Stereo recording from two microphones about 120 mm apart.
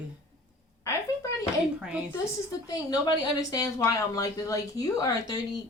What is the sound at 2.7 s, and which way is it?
Speech, 35° left (ahead or behind).